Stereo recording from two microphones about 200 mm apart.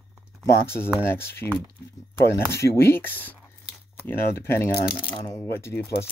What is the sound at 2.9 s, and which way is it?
Speech, 10° left (ahead or behind).